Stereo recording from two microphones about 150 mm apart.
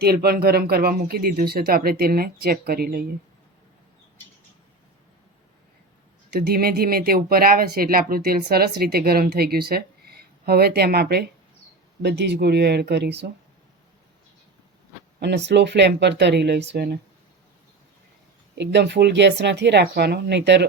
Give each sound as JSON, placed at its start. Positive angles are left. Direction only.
{"t": 0.0, "sound": "speech", "side_deg": -90}
{"t": 6.3, "sound": "speech", "side_deg": -90}
{"t": 15.5, "sound": "speech", "side_deg": -90}
{"t": 19.0, "sound": "speech", "side_deg": -65}
{"t": 19.5, "sound": "speech", "side_deg": -90}